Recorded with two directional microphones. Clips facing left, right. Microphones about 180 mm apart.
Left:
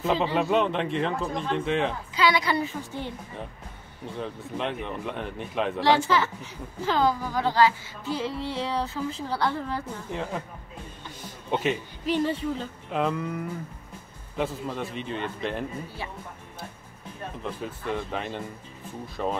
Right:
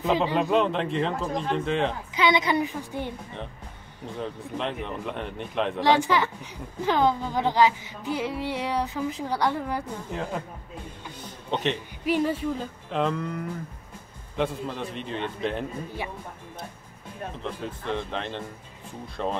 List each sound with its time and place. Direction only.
0.2 s speech: 5° left (ahead or behind)
2.1 s a woman's voice: 20° right (ahead or behind)
4.2 s speech: centre (ahead or behind)
5.8 s a woman's voice: 15° right (ahead or behind)
11.5 s speech: 5° left (ahead or behind)
12.0 s a woman's voice: 10° right (ahead or behind)
12.9 s speech: 5° left (ahead or behind)
17.4 s speech: 10° left (ahead or behind)